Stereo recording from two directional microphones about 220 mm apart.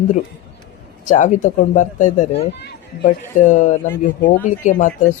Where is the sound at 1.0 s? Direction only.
35° left (ahead or behind).